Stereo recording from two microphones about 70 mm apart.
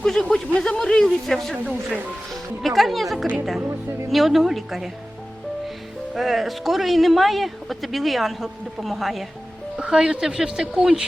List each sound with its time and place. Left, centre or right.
0.0 s a sound: centre
2.3 s speech: centre
6.1 s speech: centre
9.7 s speech: centre